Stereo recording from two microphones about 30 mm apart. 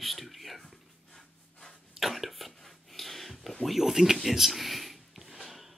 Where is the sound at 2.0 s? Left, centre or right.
Centre.